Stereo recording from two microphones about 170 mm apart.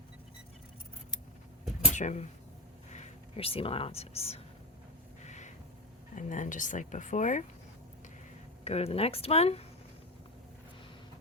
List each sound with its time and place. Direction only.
2.0 s speech: 45° left (ahead or behind)
5.2 s a sound: 45° left (ahead or behind)
6.1 s speech: 45° left (ahead or behind)
8.6 s speech: 35° left (ahead or behind)